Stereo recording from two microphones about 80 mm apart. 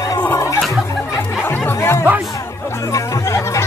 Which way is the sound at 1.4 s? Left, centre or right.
Left.